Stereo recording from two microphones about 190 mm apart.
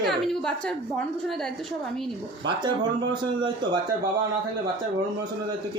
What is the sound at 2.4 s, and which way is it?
A man's voice, 25° right (ahead or behind).